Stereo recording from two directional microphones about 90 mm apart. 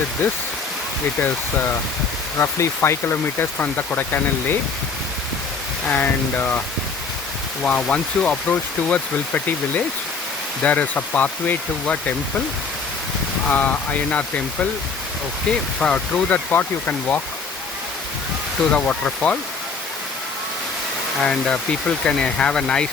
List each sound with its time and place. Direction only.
2.4 s speech: 30° left (ahead or behind)
5.9 s speech: 20° left (ahead or behind)
7.6 s speech: 15° left (ahead or behind)
13.5 s speech: 15° left (ahead or behind)
18.7 s speech: 15° left (ahead or behind)
21.2 s speech: 10° left (ahead or behind)